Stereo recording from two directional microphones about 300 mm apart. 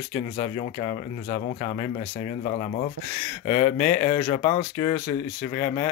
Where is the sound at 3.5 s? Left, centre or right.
Centre.